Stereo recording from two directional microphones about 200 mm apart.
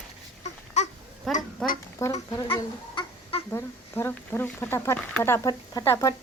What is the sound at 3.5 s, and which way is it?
Speech, 15° left (ahead or behind).